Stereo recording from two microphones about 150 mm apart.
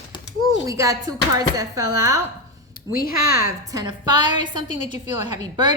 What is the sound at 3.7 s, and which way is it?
Speech, 30° right (ahead or behind).